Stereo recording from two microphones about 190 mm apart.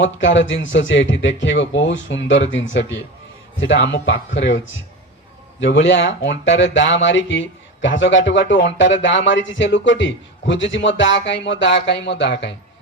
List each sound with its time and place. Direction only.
0.3 s speech: 75° left (ahead or behind)